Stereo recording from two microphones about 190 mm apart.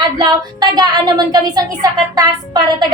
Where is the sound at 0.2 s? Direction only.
20° right (ahead or behind).